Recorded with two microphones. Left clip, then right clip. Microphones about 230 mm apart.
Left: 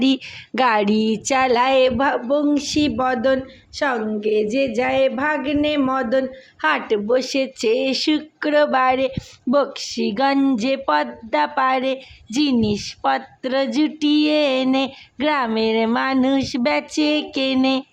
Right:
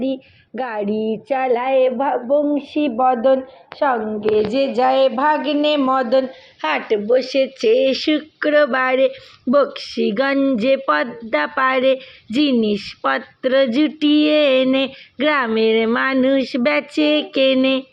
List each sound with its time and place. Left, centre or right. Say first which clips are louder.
0.0 s a woman's voice: left 3 dB; left; by 17.8 s centre